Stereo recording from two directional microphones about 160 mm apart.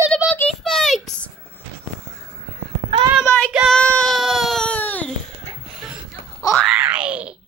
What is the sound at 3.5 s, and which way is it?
Baby cry, centre (ahead or behind).